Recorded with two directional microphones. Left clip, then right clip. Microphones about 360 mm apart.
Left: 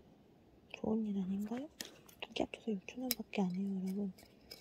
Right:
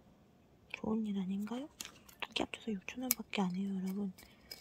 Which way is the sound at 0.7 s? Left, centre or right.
Right.